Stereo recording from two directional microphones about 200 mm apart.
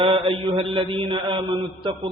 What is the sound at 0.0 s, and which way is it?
A man's voice, 25° right (ahead or behind).